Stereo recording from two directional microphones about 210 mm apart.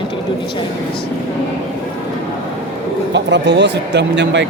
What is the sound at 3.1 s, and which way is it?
Speech, 55° right (ahead or behind).